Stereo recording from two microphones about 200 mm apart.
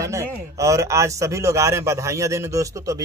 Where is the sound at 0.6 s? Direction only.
15° right (ahead or behind).